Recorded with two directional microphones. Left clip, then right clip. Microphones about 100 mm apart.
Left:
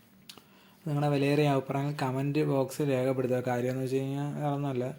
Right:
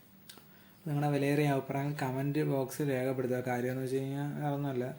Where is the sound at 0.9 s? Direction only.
20° left (ahead or behind).